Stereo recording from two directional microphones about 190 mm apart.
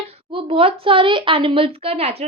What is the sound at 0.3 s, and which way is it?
A woman's voice, 30° right (ahead or behind).